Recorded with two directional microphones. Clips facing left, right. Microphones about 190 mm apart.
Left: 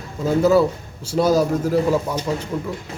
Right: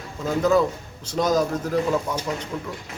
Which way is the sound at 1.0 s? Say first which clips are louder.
Left 4 dB; 10° left (ahead or behind).